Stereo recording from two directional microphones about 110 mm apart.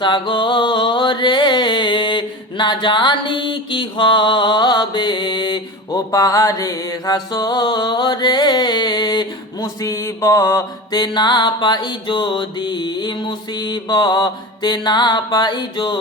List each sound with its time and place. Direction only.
0.0 s music: 45° left (ahead or behind)
9.8 s mantra: 25° left (ahead or behind)
10.9 s music: 40° left (ahead or behind)